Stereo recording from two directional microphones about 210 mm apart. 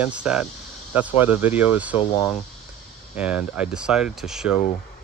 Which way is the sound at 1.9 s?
20° left (ahead or behind).